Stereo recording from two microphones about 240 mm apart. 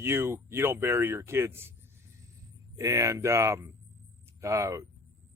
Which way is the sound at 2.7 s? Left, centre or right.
Centre.